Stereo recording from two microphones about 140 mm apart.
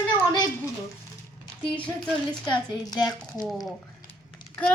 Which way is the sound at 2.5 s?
25° left (ahead or behind).